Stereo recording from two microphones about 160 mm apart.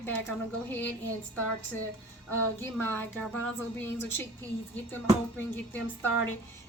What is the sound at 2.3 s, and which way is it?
A woman's voice, 15° left (ahead or behind).